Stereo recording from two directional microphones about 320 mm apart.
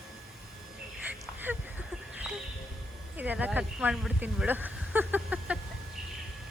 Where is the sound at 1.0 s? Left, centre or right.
Centre.